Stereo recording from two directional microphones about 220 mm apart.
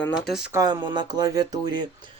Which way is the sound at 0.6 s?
20° right (ahead or behind).